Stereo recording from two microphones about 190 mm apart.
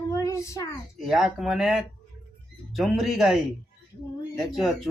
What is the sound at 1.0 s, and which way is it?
Speech, centre (ahead or behind).